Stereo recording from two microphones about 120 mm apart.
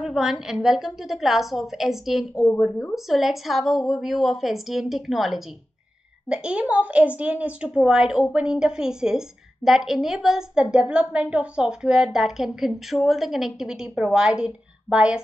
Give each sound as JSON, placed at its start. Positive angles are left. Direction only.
{"t": 0.0, "sound": "a woman's voice", "side_deg": -5}
{"t": 2.3, "sound": "a woman's voice", "side_deg": 20}
{"t": 2.9, "sound": "a woman's voice", "side_deg": 0}